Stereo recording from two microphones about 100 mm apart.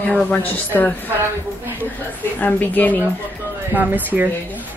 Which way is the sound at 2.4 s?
15° left (ahead or behind).